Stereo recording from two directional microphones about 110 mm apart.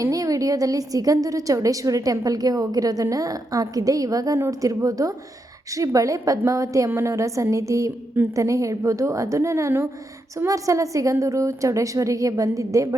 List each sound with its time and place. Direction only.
0.0 s a woman's voice: 30° right (ahead or behind)